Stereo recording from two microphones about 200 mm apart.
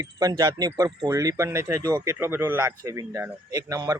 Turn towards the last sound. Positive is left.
turn(degrees=-15)  # may be behind; listen again after turning